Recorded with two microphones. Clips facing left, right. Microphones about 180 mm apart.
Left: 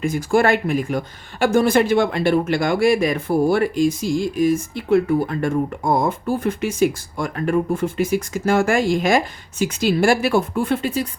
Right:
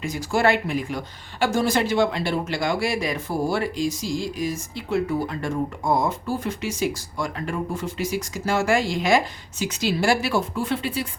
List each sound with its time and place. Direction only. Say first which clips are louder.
0.0 s speech: left 4 dB; 50° left (ahead or behind)